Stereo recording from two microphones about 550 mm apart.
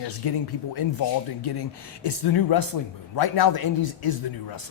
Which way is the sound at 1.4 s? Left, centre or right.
Left.